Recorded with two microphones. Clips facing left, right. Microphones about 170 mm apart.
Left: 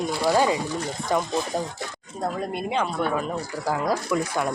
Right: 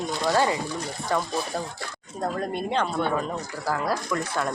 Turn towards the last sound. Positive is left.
turn(degrees=10)  # may be behind; listen again after turning